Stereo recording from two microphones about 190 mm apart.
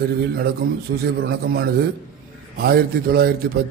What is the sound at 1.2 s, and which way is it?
A man's voice, 55° right (ahead or behind).